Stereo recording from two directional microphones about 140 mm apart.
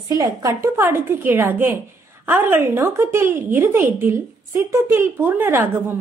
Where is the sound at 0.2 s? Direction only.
25° right (ahead or behind).